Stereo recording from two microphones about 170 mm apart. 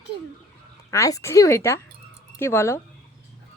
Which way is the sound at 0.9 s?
20° left (ahead or behind).